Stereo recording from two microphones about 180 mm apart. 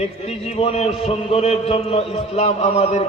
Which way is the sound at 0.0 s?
35° left (ahead or behind).